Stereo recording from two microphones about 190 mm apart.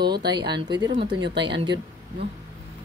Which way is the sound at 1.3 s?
65° right (ahead or behind).